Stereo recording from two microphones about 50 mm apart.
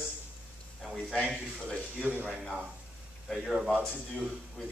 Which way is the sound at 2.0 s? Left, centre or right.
Right.